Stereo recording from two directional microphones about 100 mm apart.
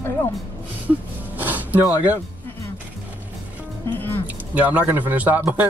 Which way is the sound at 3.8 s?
20° left (ahead or behind).